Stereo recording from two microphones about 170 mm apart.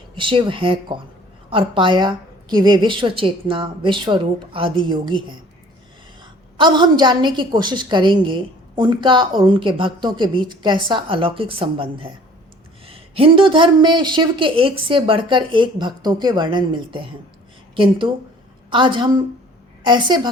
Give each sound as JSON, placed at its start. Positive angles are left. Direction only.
{"t": 0.2, "sound": "a woman's voice", "side_deg": -30}
{"t": 6.6, "sound": "a woman's voice", "side_deg": -25}